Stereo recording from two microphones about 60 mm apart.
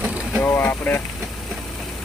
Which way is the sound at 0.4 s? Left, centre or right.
Left.